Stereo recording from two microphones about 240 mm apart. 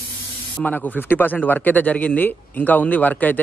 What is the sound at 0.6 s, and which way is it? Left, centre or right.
A man's voice, centre.